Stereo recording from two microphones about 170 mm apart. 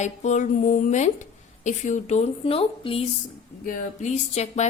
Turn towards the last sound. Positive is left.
turn(degrees=45)  # may be behind; listen again after turning